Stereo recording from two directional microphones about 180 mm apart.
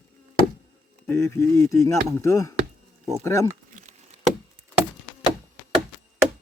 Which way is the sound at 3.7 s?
40° right (ahead or behind).